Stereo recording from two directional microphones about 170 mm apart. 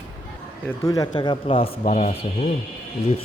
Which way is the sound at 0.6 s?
20° left (ahead or behind).